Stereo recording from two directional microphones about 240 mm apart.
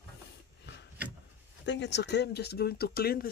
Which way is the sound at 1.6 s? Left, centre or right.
Left.